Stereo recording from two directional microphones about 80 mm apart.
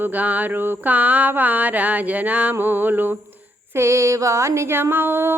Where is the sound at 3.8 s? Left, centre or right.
Right.